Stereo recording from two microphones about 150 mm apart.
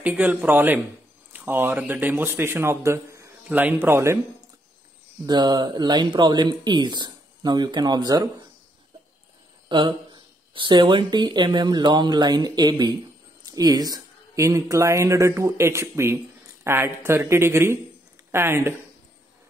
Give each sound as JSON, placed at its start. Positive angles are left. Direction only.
{"t": 0.0, "sound": "speech", "side_deg": -10}
{"t": 5.2, "sound": "speech", "side_deg": -30}
{"t": 9.7, "sound": "speech", "side_deg": -30}